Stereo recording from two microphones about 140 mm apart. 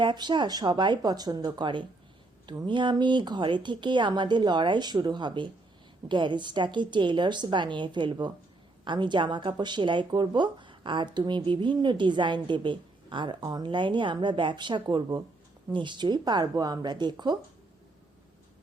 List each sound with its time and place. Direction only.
0.0 s a woman's voice: 35° right (ahead or behind)